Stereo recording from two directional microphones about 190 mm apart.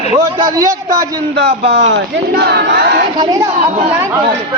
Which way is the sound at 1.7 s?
65° right (ahead or behind).